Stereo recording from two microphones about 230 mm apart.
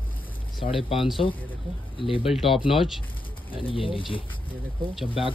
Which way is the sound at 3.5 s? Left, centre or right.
Left.